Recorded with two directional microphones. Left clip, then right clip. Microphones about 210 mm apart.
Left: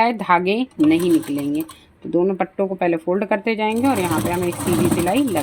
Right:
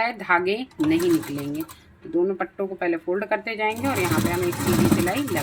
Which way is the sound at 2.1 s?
40° left (ahead or behind).